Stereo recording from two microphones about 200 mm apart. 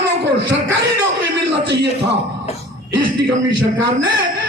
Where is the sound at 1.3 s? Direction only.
60° right (ahead or behind).